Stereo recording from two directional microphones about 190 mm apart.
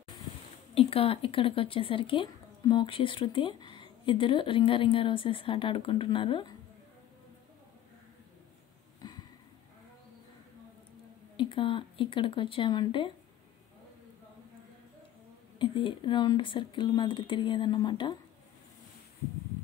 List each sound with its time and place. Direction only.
0.7 s speech: 30° left (ahead or behind)
11.3 s speech: 25° left (ahead or behind)
15.6 s speech: 25° left (ahead or behind)